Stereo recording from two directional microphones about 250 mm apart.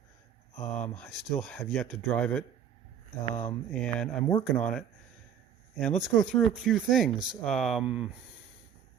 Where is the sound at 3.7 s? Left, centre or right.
Centre.